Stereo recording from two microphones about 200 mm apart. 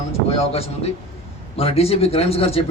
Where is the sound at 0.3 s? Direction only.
30° left (ahead or behind).